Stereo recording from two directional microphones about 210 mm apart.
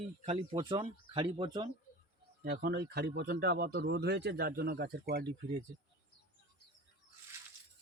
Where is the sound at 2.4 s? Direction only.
45° right (ahead or behind).